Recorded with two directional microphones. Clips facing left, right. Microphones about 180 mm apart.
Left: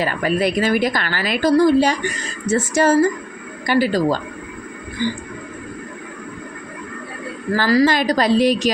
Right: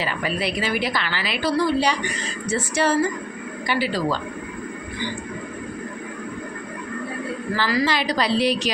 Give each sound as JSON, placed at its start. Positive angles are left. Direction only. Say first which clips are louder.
{"t": 0.0, "sound": "a woman's voice", "louder": "left 6 dB", "side_deg": 45}
{"t": 7.5, "sound": "a woman's voice", "louder": "left 7 dB", "side_deg": 40}